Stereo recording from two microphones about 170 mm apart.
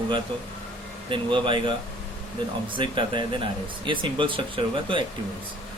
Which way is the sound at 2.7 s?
30° right (ahead or behind).